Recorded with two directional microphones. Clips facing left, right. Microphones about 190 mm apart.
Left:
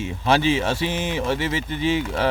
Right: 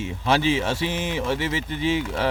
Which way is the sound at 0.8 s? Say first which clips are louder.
Left 1 dB; 25° left (ahead or behind).